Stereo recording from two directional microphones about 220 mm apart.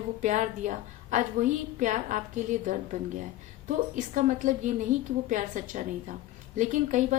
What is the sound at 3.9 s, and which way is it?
A woman's voice, 35° right (ahead or behind).